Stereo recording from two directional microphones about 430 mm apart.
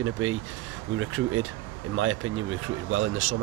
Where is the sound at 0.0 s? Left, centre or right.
Right.